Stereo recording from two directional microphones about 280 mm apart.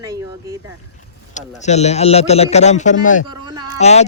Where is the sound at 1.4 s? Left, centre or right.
Left.